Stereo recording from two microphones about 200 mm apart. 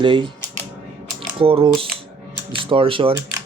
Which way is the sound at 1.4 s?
25° right (ahead or behind).